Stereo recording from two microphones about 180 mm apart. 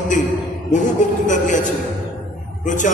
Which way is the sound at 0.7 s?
45° left (ahead or behind).